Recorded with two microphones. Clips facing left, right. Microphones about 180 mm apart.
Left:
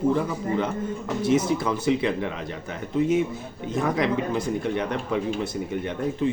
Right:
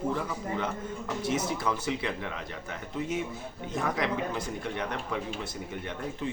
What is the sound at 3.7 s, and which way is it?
Speech, 25° left (ahead or behind).